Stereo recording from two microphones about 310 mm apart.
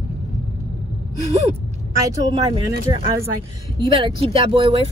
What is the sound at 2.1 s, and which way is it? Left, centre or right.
Speech, centre.